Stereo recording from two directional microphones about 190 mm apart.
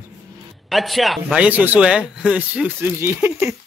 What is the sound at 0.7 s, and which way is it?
Speech, centre (ahead or behind).